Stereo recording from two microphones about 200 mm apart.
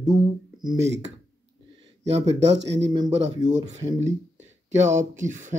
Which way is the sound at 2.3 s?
65° right (ahead or behind).